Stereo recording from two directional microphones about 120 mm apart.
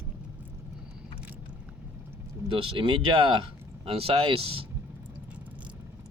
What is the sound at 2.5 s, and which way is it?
Speech, 45° right (ahead or behind).